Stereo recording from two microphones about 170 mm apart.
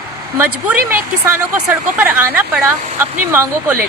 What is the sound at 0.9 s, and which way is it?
Speech, 10° right (ahead or behind).